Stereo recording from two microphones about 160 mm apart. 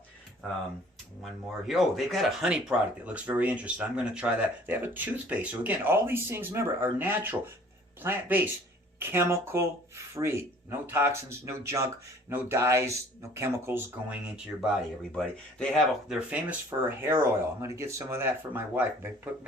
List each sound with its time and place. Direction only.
1.2 s speech: centre (ahead or behind)
14.6 s speech: centre (ahead or behind)